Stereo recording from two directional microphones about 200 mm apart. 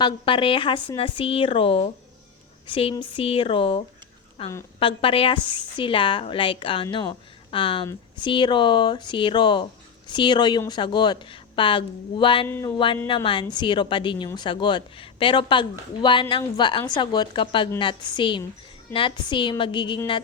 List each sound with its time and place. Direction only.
0.0 s a woman's voice: 25° left (ahead or behind)
12.5 s a sound: 10° left (ahead or behind)
12.7 s a woman's voice: 25° left (ahead or behind)